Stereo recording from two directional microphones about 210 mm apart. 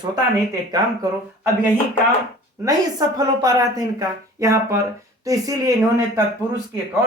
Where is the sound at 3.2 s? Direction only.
15° right (ahead or behind).